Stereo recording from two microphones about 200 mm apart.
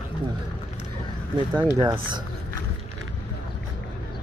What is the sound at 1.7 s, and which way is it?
Speech, 20° right (ahead or behind).